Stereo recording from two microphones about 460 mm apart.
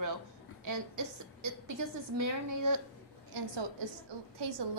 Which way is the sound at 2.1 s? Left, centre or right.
Right.